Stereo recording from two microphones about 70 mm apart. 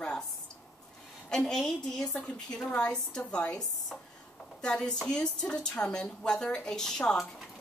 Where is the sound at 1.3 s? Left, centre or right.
Centre.